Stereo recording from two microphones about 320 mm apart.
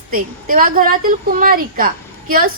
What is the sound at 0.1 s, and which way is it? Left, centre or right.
A woman's voice, right.